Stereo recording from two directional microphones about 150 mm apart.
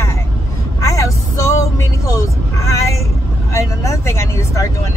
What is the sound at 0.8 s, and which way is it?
Speech, 20° left (ahead or behind).